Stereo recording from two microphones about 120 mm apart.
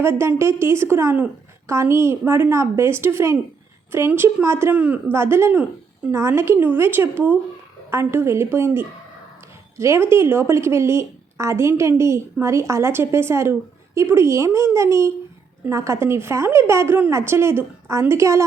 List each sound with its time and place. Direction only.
0.0 s a woman's voice: 20° right (ahead or behind)
4.7 s a woman's voice: 10° right (ahead or behind)